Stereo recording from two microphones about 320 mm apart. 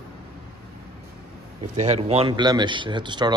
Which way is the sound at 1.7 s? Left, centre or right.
Right.